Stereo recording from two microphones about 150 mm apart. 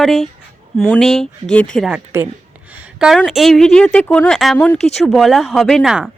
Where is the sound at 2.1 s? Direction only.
15° right (ahead or behind).